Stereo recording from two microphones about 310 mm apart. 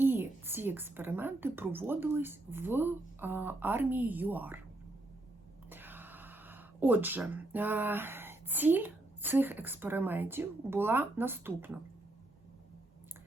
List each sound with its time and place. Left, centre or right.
0.0 s a woman's voice: centre
5.7 s speech: centre